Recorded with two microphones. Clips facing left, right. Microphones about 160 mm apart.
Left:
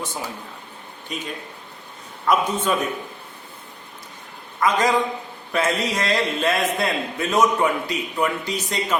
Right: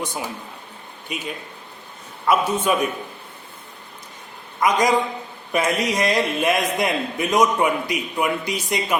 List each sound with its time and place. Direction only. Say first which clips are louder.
0.0 s a man's voice: right 2 dB; 15° right (ahead or behind)
4.6 s a man's voice: right 1 dB; 15° right (ahead or behind)